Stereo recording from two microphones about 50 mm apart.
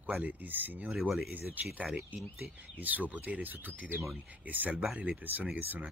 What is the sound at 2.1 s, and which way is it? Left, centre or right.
Speech, right.